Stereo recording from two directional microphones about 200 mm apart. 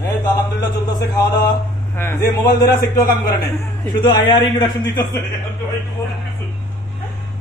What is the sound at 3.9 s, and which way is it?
A man's voice, 20° left (ahead or behind).